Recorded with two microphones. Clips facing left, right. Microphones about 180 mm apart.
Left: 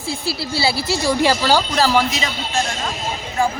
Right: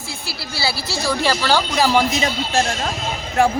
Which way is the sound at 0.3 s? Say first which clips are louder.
Left 4 dB; 25° left (ahead or behind).